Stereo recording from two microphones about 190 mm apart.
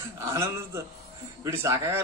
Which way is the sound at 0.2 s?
15° right (ahead or behind).